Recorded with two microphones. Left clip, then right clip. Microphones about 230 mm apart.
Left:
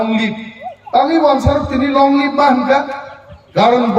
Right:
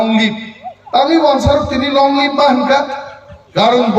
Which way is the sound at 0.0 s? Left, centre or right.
Right.